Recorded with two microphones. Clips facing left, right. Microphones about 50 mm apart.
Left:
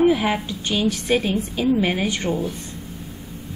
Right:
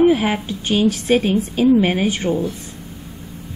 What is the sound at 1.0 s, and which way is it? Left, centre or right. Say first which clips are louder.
Speech: right 4 dB; centre.